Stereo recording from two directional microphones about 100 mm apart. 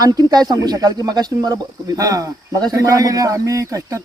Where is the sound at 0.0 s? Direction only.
40° right (ahead or behind).